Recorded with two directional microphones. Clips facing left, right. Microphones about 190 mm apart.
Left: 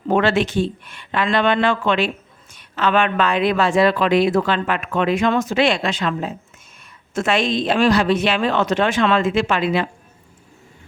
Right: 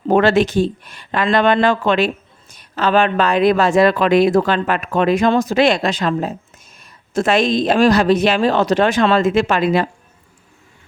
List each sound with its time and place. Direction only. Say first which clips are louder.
0.1 s speech: right 4 dB; 40° right (ahead or behind)